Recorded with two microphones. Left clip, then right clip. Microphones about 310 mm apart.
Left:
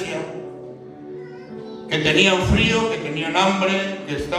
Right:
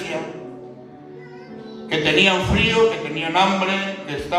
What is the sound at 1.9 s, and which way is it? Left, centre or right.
A man's voice, right.